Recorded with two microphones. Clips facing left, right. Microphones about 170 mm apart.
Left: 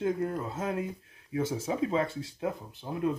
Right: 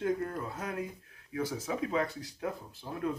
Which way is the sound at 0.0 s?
25° left (ahead or behind).